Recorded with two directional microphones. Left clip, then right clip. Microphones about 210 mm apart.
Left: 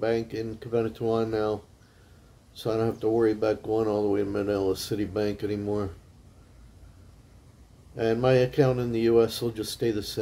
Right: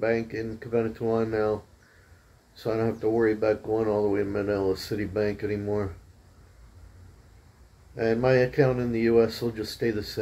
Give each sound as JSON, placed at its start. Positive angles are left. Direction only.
{"t": 0.0, "sound": "speech", "side_deg": 20}
{"t": 2.6, "sound": "speech", "side_deg": 20}
{"t": 7.9, "sound": "speech", "side_deg": 20}